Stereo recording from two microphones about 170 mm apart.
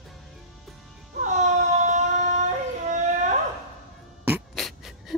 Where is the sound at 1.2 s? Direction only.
45° right (ahead or behind).